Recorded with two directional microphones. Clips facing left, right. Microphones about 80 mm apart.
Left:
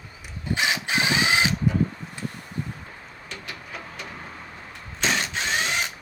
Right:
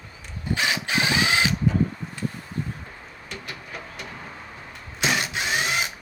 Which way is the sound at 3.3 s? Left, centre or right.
Centre.